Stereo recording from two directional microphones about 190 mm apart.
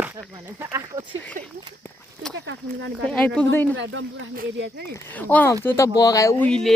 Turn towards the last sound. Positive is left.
turn(degrees=15)  # may be behind; listen again after turning